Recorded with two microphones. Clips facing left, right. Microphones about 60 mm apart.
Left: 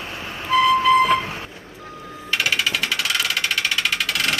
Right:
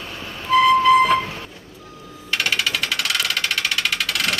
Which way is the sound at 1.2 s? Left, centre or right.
Left.